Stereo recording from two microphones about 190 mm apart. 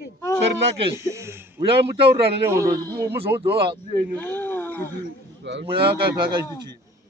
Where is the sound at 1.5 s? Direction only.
30° right (ahead or behind).